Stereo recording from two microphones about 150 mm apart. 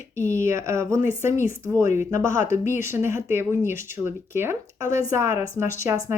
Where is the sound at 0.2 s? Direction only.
20° right (ahead or behind).